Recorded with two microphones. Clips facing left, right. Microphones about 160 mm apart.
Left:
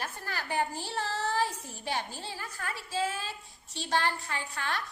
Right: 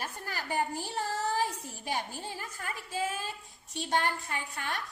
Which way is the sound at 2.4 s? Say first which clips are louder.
Left 1 dB; 20° right (ahead or behind).